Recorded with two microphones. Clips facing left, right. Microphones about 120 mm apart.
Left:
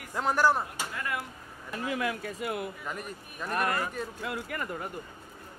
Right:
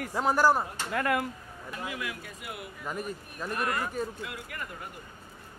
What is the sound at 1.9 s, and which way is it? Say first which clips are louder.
Speech: left 6 dB; 45° left (ahead or behind).